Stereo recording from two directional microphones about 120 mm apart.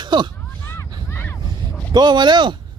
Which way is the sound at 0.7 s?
20° left (ahead or behind).